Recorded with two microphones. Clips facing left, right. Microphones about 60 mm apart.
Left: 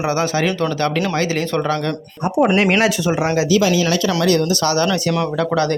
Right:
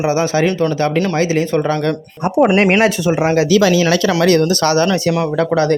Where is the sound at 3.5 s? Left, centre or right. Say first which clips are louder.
Right 3 dB; right.